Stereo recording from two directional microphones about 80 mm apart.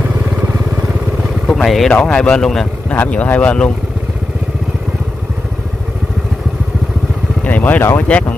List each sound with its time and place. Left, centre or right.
1.5 s speech: centre
1.9 s speech: centre
3.0 s speech: centre
7.4 s vehicle: centre
8.1 s speech: centre